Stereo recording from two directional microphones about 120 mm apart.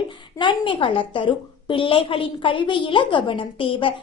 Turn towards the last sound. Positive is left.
turn(degrees=45)  # may be behind; listen again after turning